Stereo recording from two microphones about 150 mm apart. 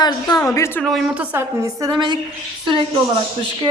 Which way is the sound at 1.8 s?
30° right (ahead or behind).